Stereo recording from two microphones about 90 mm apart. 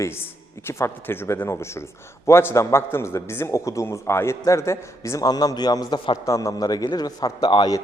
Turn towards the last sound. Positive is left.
turn(degrees=55)  # may be behind; listen again after turning